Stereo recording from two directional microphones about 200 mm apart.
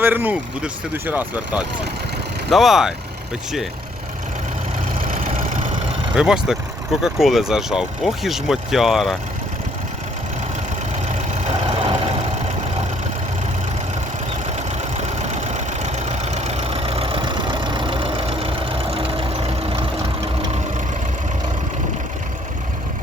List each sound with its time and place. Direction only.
0.0 s speech: 10° right (ahead or behind)
4.9 s vehicle: 45° right (ahead or behind)
6.1 s speech: 5° right (ahead or behind)
11.1 s vehicle: 30° right (ahead or behind)
14.4 s vehicle: 35° right (ahead or behind)